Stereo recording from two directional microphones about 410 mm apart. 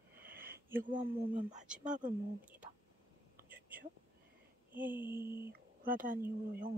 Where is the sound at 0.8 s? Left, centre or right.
Centre.